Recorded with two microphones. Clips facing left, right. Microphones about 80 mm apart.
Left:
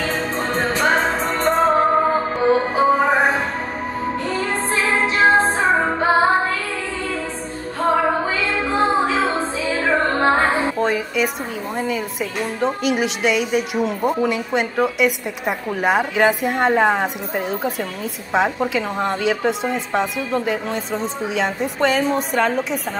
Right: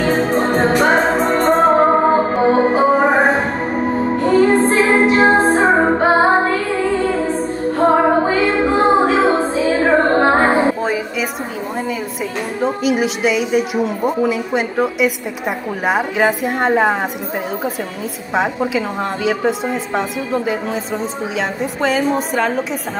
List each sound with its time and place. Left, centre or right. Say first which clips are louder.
0.0 s music: right 7 dB; right
10.8 s a sound: even; centre
12.5 s a woman's voice: right 3 dB; centre
18.3 s a woman's voice: right 1 dB; centre